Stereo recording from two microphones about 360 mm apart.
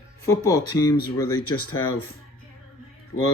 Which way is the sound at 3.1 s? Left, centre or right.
Left.